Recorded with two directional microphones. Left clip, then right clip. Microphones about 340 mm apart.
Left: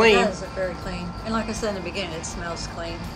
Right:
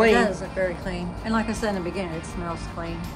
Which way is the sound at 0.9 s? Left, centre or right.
Right.